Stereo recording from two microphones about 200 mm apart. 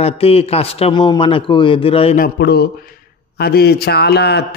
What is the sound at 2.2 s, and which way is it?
A man's voice, 55° left (ahead or behind).